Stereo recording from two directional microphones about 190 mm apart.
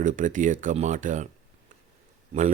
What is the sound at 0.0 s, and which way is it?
Speech, 45° right (ahead or behind).